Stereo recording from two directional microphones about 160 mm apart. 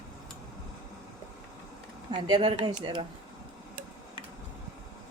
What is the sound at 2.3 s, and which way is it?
Speech, 30° right (ahead or behind).